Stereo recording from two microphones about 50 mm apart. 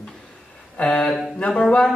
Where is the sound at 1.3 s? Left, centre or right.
Centre.